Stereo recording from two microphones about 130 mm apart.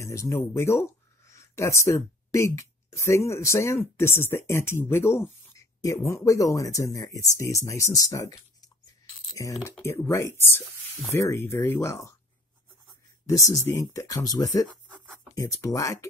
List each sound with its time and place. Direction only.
0.0 s speech: 20° left (ahead or behind)
13.3 s speech: 25° left (ahead or behind)